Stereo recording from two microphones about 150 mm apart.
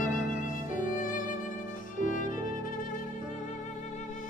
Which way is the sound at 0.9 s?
65° left (ahead or behind).